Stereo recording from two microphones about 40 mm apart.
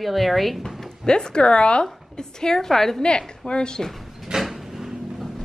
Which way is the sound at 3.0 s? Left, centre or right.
Left.